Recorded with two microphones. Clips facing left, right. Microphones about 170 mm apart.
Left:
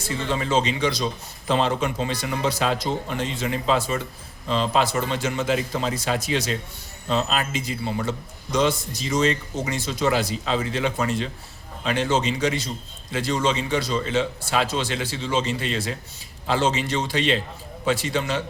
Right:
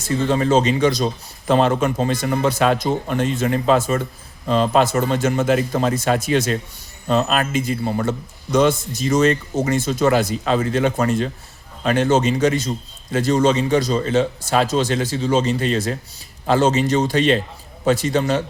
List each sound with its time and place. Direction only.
0.0 s a man's voice: 45° right (ahead or behind)